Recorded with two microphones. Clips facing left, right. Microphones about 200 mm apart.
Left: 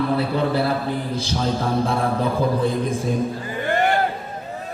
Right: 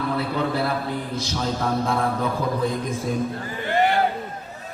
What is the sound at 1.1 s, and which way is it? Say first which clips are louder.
A man's voice: left 3 dB; 30° left (ahead or behind).